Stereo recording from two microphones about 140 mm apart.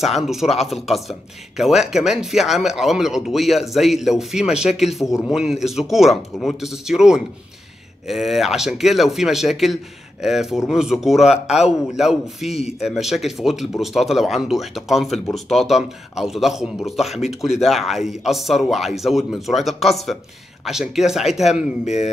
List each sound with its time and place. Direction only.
0.0 s speech: centre (ahead or behind)
12.4 s a man's voice: 50° left (ahead or behind)
12.8 s speech: 5° right (ahead or behind)